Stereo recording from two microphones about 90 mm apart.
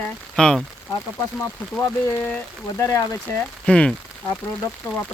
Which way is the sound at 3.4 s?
10° left (ahead or behind).